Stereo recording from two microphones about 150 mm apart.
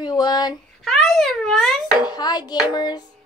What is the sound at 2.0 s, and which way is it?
A woman's voice, 25° left (ahead or behind).